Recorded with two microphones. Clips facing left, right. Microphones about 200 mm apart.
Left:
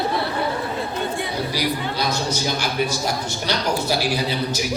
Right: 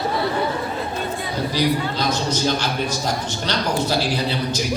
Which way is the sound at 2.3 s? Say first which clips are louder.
Right 3 dB; 10° left (ahead or behind).